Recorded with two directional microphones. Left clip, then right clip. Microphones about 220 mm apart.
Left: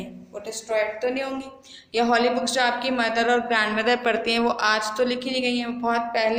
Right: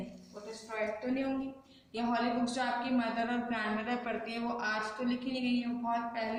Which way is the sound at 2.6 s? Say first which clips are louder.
Left 11 dB; 45° left (ahead or behind).